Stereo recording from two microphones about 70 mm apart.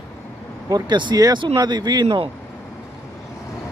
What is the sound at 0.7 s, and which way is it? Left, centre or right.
Speech, right.